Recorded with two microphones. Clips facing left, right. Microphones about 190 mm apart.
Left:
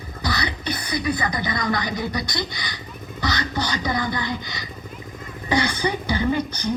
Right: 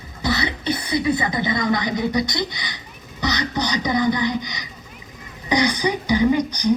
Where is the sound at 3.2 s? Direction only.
20° right (ahead or behind).